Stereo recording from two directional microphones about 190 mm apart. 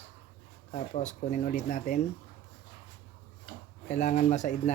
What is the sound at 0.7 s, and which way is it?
Speech, 40° left (ahead or behind).